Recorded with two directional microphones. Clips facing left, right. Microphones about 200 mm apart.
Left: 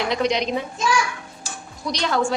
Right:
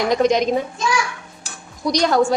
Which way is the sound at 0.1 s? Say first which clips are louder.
Right 7 dB; 45° right (ahead or behind).